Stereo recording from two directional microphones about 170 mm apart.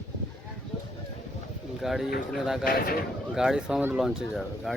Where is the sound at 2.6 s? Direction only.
60° left (ahead or behind).